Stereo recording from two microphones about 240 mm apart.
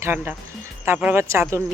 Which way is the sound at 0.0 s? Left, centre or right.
Centre.